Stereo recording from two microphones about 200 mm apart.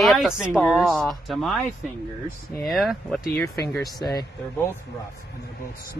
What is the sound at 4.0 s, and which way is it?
Speech, 20° left (ahead or behind).